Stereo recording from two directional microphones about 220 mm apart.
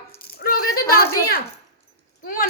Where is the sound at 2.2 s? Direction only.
40° left (ahead or behind).